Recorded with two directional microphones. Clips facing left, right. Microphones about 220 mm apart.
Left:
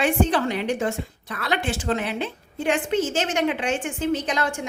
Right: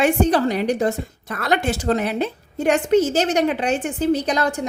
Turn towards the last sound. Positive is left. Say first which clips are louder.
# right 4 dB
turn(degrees=-40)  # may be behind; listen again after turning